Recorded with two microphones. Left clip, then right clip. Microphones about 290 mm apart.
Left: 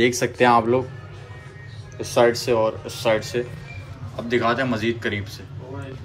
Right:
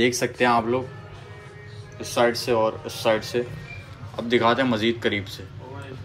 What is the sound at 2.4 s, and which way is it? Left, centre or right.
Speech, centre.